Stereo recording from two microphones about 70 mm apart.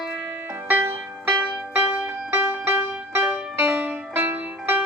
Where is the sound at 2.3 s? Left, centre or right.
Right.